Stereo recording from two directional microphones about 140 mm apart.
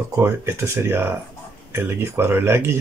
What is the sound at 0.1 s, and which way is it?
Speech, 20° right (ahead or behind).